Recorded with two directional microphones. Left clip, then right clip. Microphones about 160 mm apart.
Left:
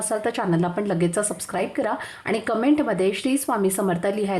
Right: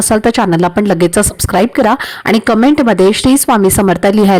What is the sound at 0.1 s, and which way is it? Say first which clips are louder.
A woman's voice: right 13 dB; 55° right (ahead or behind).